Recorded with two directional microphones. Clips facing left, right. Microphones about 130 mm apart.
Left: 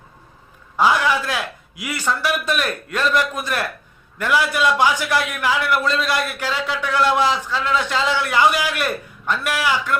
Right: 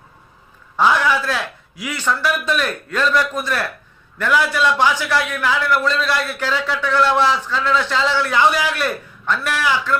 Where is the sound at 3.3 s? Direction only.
15° left (ahead or behind).